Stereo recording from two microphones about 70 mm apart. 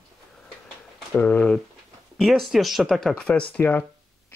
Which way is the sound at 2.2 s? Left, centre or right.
Centre.